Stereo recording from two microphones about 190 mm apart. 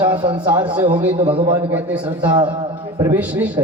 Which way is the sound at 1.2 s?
25° right (ahead or behind).